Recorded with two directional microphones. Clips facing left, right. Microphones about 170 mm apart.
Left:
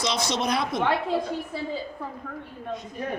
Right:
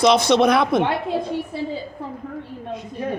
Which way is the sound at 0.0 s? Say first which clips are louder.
Right 11 dB; 60° right (ahead or behind).